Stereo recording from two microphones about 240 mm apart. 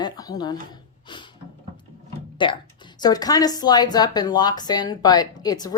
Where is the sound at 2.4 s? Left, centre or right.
Centre.